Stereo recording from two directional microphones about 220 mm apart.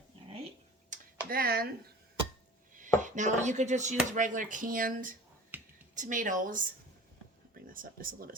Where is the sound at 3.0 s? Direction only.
35° right (ahead or behind).